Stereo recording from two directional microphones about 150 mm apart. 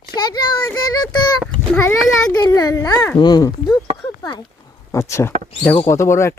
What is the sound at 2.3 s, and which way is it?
Speech, 25° left (ahead or behind).